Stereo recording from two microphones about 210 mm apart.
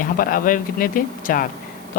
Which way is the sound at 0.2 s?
40° left (ahead or behind).